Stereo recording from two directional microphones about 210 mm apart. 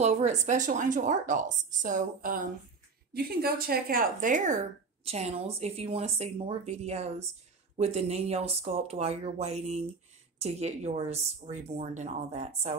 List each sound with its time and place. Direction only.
0.0 s speech: 35° right (ahead or behind)